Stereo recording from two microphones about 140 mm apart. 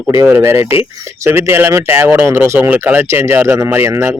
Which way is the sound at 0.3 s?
15° right (ahead or behind).